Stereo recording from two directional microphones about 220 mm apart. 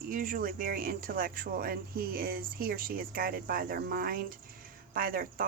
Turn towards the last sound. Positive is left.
turn(degrees=-40)  # may be behind; listen again after turning